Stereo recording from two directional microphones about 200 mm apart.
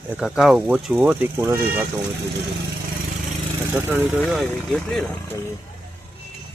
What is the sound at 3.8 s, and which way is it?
Speech, 10° right (ahead or behind).